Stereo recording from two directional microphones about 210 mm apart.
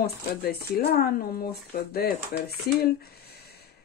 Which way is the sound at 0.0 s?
45° left (ahead or behind).